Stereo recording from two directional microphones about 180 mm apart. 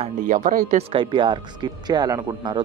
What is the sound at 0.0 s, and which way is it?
Speech, 45° right (ahead or behind).